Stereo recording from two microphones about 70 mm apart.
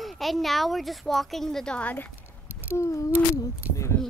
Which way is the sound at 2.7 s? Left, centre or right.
Left.